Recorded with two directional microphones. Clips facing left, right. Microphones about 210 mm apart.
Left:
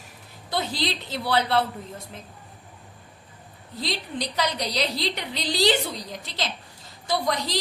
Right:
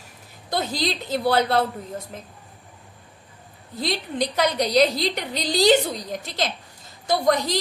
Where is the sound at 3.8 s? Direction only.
50° right (ahead or behind).